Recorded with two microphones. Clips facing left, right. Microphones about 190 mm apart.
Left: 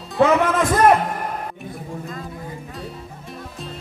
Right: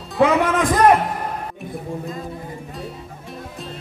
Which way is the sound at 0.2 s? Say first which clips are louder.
Even; 15° right (ahead or behind).